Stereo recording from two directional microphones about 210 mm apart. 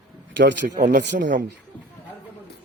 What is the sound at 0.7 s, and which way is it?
Music, 35° right (ahead or behind).